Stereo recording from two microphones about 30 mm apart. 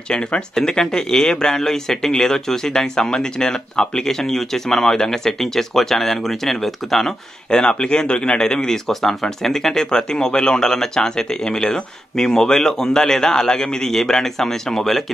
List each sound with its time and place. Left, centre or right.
0.7 s speech: left; by 7.2 s centre
7.5 s speech: left
8.4 s speech: left